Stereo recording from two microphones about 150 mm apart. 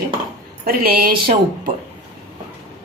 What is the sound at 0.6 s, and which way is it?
A woman's voice, 80° right.